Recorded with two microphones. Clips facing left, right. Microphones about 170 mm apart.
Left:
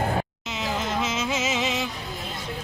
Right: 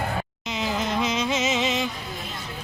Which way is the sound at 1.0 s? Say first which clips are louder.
Right 2 dB; 5° left (ahead or behind).